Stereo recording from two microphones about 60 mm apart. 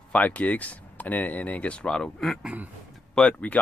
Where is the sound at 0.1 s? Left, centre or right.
Left.